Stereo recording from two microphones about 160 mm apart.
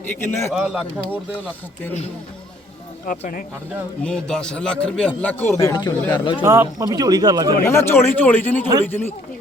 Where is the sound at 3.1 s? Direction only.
60° left (ahead or behind).